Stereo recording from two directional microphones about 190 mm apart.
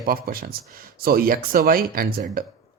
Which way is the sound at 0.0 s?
50° right (ahead or behind).